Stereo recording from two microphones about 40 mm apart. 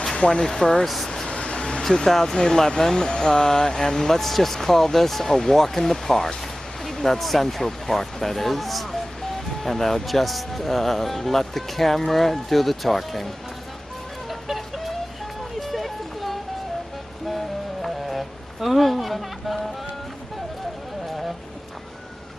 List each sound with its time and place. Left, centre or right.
0.3 s speech: centre
0.9 s vehicle: centre
1.3 s vehicle: left
1.8 s speech: centre
14.3 s music: centre
15.5 s a sound: centre
17.8 s music: centre